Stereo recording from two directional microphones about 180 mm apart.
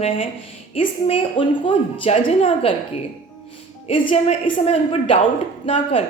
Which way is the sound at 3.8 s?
35° left (ahead or behind).